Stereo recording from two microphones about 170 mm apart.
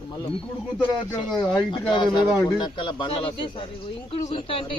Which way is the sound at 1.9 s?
25° left (ahead or behind).